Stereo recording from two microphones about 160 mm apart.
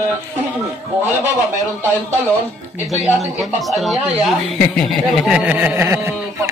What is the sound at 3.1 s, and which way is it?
Speech, centre (ahead or behind).